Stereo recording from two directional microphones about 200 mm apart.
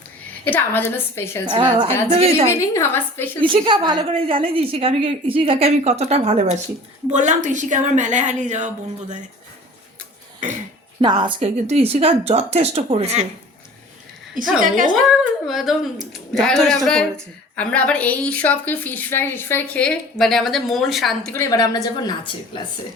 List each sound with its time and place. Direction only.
0.4 s a woman's voice: 10° left (ahead or behind)
1.5 s a woman's voice: 25° right (ahead or behind)
2.5 s a woman's voice: 15° left (ahead or behind)
3.4 s a woman's voice: 25° right (ahead or behind)
11.0 s speech: 25° right (ahead or behind)
14.4 s a woman's voice: 40° right (ahead or behind)
15.2 s a woman's voice: centre (ahead or behind)
21.3 s a woman's voice: 15° left (ahead or behind)